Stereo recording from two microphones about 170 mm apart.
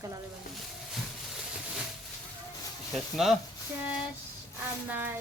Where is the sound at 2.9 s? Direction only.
Centre (ahead or behind).